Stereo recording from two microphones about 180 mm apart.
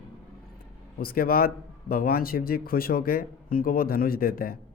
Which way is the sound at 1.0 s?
55° left (ahead or behind).